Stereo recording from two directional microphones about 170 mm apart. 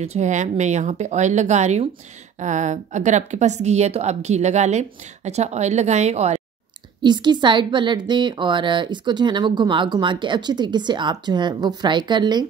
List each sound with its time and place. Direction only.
0.0 s a woman's voice: 40° right (ahead or behind)
7.0 s speech: 25° right (ahead or behind)